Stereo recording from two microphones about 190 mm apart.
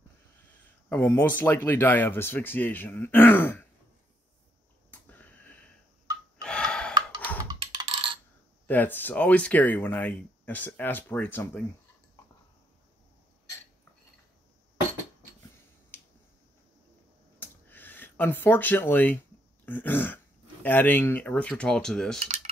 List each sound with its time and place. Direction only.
0.8 s speech: 10° left (ahead or behind)
4.9 s a sound: 10° left (ahead or behind)
6.4 s gasp: 5° left (ahead or behind)
7.5 s music: 25° right (ahead or behind)
8.6 s speech: 10° left (ahead or behind)
17.4 s a sound: 10° left (ahead or behind)
19.6 s speech: 10° left (ahead or behind)